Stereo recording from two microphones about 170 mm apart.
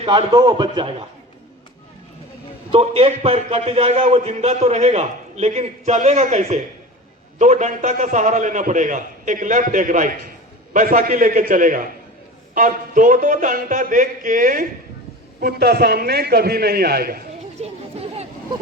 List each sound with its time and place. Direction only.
0.0 s a man's voice: 30° right (ahead or behind)
2.7 s a man's voice: 35° right (ahead or behind); by 14.7 s 55° right (ahead or behind)
15.4 s a man's voice: 65° right (ahead or behind)
17.6 s chatter: 40° right (ahead or behind)